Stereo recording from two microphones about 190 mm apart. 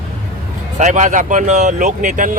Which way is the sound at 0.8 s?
40° right (ahead or behind).